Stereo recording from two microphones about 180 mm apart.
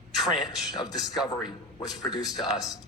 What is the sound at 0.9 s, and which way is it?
A woman's voice, centre (ahead or behind).